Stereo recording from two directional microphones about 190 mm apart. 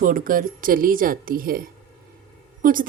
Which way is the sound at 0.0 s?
45° right (ahead or behind).